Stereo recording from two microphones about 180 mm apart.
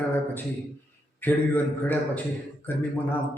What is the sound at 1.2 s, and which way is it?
A man's voice, 10° left (ahead or behind).